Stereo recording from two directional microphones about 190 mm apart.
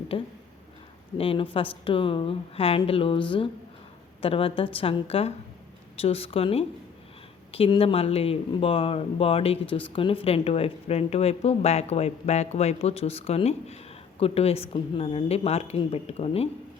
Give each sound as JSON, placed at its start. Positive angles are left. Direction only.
{"t": 0.1, "sound": "a woman's voice", "side_deg": 30}